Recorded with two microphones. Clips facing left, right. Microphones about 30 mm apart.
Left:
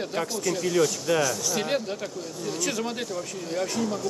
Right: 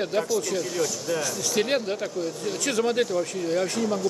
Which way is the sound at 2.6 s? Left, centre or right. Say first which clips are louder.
Right 8 dB; centre.